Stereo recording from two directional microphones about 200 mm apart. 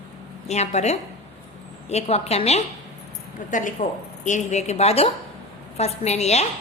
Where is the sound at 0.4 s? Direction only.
35° left (ahead or behind).